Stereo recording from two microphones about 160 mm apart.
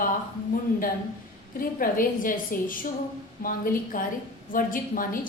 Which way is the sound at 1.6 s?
60° left (ahead or behind).